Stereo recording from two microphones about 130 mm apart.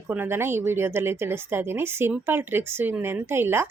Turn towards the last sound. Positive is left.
turn(degrees=-20)  # may be behind; listen again after turning